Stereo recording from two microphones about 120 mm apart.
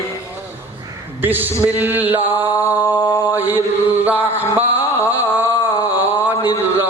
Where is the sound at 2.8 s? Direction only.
30° left (ahead or behind).